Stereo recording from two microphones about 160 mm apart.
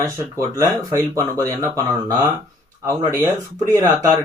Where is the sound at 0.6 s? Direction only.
20° right (ahead or behind).